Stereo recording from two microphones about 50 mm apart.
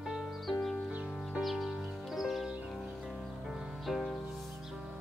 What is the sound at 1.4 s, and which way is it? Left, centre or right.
Music, centre.